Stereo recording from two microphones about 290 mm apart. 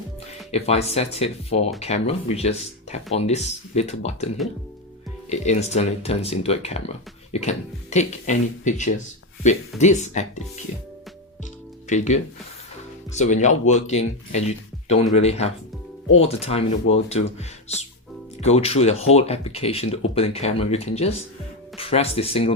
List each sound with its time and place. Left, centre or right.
0.5 s speech: left
5.3 s speech: left
11.9 s speech: left
18.4 s speech: left